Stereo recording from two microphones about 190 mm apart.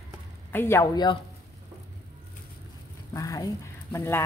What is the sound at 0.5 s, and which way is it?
Speech, 10° left (ahead or behind).